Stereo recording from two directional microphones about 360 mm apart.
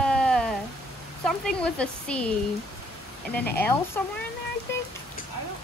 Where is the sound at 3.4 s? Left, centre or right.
Centre.